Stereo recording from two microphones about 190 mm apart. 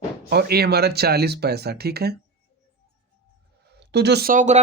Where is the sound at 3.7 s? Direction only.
60° right (ahead or behind); by 4.6 s 40° right (ahead or behind).